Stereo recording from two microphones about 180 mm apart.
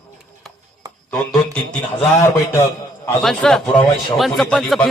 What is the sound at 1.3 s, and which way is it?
Speech, 5° left (ahead or behind).